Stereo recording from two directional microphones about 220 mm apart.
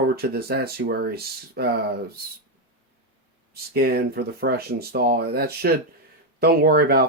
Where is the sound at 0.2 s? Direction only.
45° right (ahead or behind).